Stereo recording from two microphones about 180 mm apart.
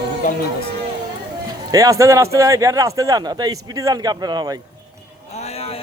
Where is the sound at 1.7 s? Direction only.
20° right (ahead or behind).